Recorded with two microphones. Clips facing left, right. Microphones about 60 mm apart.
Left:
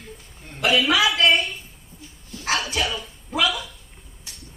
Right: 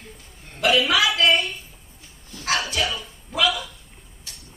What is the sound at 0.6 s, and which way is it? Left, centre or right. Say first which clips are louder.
Speech: even; centre.